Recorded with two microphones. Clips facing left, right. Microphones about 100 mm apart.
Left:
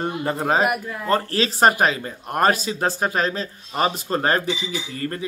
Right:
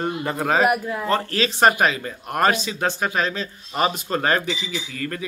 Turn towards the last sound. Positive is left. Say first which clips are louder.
# left 1 dB
turn(degrees=35)  # may be behind; listen again after turning